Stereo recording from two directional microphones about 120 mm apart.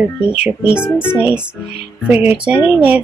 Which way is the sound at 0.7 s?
10° right (ahead or behind).